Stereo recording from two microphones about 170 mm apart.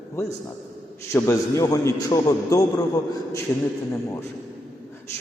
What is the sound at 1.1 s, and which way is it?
A man's voice, 15° left (ahead or behind).